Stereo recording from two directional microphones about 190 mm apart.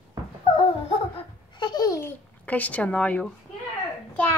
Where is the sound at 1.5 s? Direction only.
20° left (ahead or behind).